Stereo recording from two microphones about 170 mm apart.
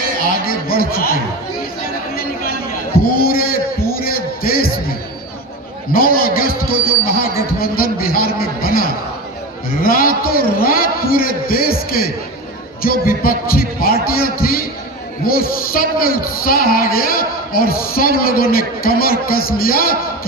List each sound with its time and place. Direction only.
0.4 s a sound: 60° left (ahead or behind)
3.2 s music: 60° left (ahead or behind)
5.9 s a man's voice: 60° left (ahead or behind)